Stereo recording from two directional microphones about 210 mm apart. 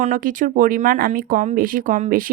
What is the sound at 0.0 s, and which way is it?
Speech, 40° right (ahead or behind).